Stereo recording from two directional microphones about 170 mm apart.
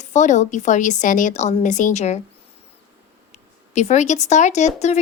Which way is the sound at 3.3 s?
40° left (ahead or behind).